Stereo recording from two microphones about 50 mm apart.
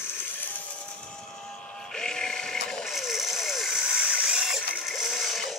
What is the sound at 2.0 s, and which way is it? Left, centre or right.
Sheep, centre.